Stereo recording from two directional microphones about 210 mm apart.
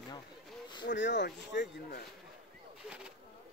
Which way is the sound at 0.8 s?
55° left (ahead or behind).